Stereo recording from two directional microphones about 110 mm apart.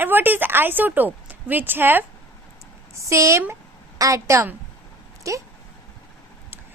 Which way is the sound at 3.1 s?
30° right (ahead or behind).